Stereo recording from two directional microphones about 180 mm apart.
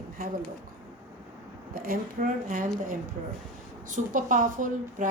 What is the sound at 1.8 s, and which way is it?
Speech, 50° right (ahead or behind).